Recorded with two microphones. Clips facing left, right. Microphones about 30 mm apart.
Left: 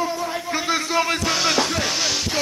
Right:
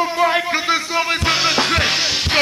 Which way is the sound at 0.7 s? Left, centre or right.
Right.